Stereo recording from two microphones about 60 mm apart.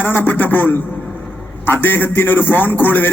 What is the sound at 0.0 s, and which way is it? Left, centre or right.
A man's voice, left.